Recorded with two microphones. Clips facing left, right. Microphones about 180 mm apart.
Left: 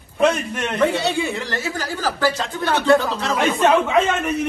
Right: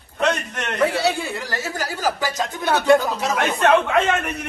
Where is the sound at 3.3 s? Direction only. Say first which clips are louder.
Left 1 dB; centre (ahead or behind).